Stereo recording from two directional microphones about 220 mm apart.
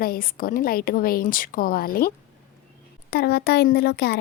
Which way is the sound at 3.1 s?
45° left (ahead or behind).